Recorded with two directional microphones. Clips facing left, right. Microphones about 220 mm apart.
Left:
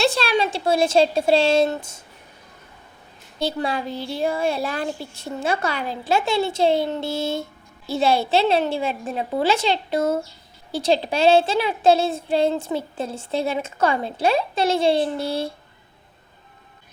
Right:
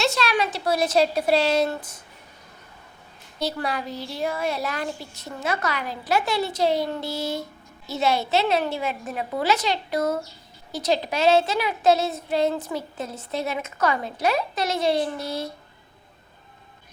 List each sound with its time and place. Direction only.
0.0 s speech: 30° left (ahead or behind)
3.3 s speech: 25° left (ahead or behind)